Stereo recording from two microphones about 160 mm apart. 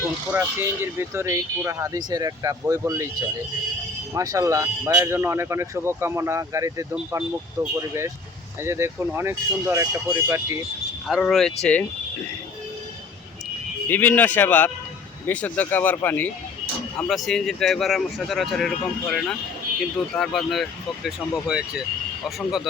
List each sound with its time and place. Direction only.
0.3 s speech: 15° right (ahead or behind)
11.1 s speech: centre (ahead or behind)
13.8 s speech: 10° left (ahead or behind)
17.0 s speech: centre (ahead or behind)